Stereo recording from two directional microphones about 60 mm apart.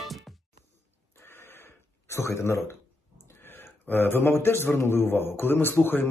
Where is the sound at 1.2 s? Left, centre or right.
Left.